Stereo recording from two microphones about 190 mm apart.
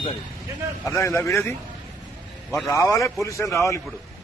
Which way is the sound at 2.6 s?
15° left (ahead or behind).